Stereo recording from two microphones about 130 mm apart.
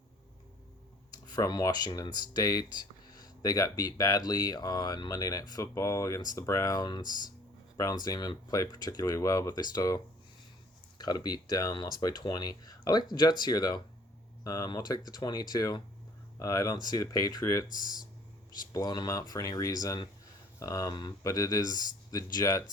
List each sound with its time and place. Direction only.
1.1 s speech: 30° left (ahead or behind)
18.7 s speech: 30° left (ahead or behind)